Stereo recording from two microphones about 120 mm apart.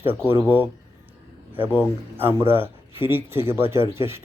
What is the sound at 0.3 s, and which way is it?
A man's voice, 20° right (ahead or behind).